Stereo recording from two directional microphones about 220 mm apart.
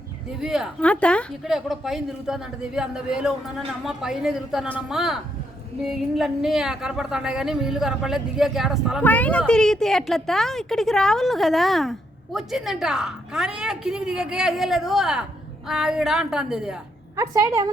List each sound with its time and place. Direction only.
0.3 s a woman's voice: centre (ahead or behind)
17.2 s a woman's voice: 15° right (ahead or behind)